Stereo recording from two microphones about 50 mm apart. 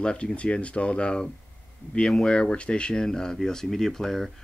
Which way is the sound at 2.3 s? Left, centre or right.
Left.